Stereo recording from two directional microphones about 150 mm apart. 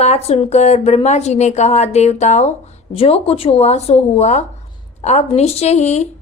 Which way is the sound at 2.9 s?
40° left (ahead or behind).